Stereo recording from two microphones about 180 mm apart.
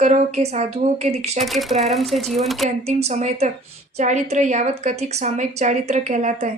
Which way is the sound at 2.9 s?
35° right (ahead or behind).